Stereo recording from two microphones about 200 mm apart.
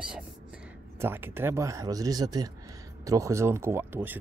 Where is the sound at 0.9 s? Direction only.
10° right (ahead or behind).